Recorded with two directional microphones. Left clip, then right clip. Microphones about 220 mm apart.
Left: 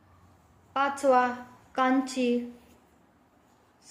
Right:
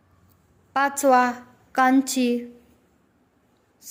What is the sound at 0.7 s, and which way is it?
A woman's voice, 55° right (ahead or behind).